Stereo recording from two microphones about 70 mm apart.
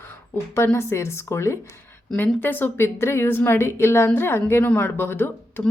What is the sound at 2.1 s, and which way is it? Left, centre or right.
A woman's voice, left.